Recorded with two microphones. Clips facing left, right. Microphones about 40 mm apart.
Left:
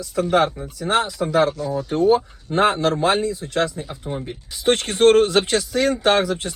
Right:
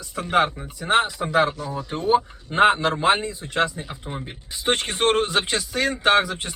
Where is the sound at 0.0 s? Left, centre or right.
Right.